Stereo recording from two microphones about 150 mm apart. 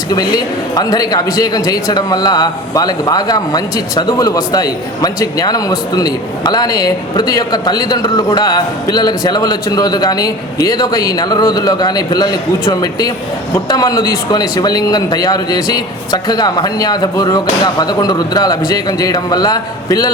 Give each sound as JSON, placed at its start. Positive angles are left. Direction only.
{"t": 0.1, "sound": "a man's voice", "side_deg": 25}